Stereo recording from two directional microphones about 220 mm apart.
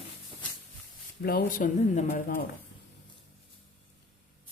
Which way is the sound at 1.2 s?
40° left (ahead or behind).